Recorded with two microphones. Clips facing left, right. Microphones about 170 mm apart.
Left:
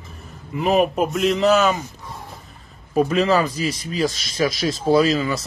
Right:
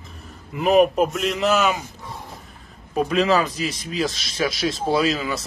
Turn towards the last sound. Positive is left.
turn(degrees=0)  # may be behind; listen again after turning